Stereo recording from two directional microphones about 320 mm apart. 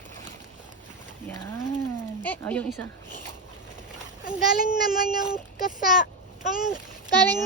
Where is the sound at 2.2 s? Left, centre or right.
Centre.